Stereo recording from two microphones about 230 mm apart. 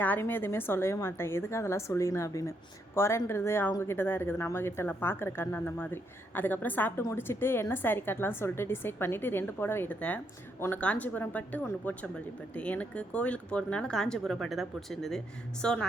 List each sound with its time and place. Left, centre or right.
0.0 s a woman's voice: centre